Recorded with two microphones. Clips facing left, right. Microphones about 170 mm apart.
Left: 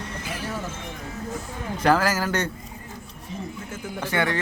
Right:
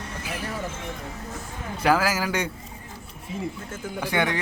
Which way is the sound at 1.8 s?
5° right (ahead or behind).